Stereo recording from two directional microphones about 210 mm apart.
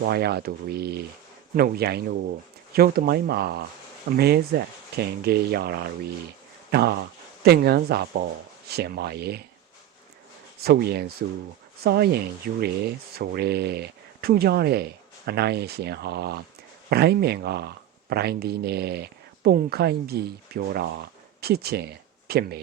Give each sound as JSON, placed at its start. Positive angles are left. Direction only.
{"t": 0.0, "sound": "speech", "side_deg": -50}
{"t": 10.6, "sound": "speech", "side_deg": -50}